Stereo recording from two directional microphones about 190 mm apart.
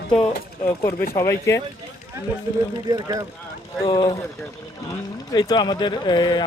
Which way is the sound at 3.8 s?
25° left (ahead or behind).